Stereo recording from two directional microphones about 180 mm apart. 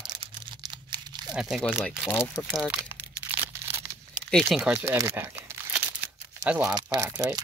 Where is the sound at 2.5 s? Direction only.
5° right (ahead or behind).